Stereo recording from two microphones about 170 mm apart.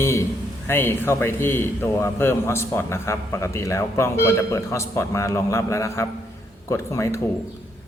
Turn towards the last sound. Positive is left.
turn(degrees=15)  # may be behind; listen again after turning